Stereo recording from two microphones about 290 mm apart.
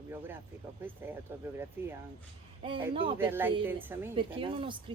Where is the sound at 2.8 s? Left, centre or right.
Centre.